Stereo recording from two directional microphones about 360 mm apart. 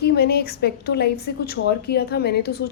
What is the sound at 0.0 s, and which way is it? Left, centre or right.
Speech, left.